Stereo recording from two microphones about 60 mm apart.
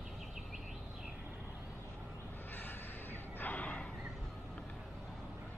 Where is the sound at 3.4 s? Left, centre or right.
Left.